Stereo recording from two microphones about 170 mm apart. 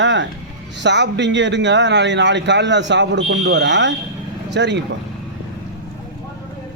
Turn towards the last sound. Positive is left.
turn(degrees=-90)